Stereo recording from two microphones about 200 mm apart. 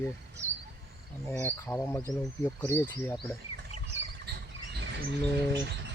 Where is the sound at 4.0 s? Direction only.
65° right (ahead or behind).